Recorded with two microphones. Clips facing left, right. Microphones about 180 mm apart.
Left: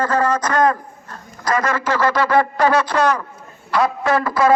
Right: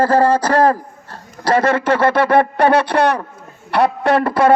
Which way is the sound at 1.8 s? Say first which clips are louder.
Right 4 dB; 60° right (ahead or behind).